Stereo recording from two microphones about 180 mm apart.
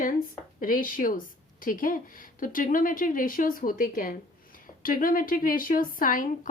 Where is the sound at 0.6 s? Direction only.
50° left (ahead or behind).